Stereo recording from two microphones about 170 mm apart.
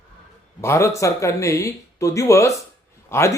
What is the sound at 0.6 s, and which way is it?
Speech, 15° left (ahead or behind).